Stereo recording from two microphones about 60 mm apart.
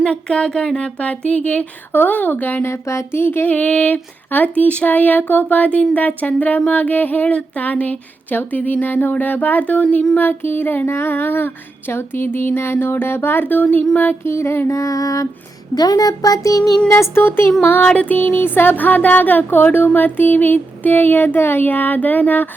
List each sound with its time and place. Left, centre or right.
0.0 s speech: centre
1.9 s music: left
2.6 s speech: left
3.5 s a sound: left
10.2 s music: left
14.3 s speech: left
14.8 s a sound: left
15.7 s speech: left
16.9 s speech: left
17.2 s music: left
17.8 s a sound: left
18.2 s music: left